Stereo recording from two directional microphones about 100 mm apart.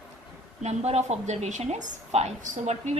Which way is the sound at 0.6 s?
90° right.